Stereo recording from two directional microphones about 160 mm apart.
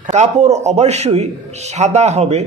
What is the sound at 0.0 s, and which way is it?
A man's voice, 45° right (ahead or behind).